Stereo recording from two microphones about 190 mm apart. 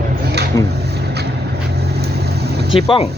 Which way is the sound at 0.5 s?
20° left (ahead or behind).